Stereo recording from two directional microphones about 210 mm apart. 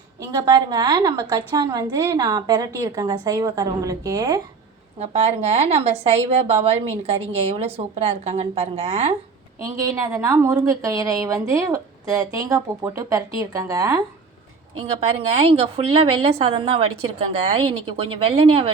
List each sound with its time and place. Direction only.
0.2 s a woman's voice: 20° right (ahead or behind)
4.9 s a woman's voice: 30° right (ahead or behind)
9.6 s a woman's voice: 15° right (ahead or behind)
14.8 s a woman's voice: 30° right (ahead or behind)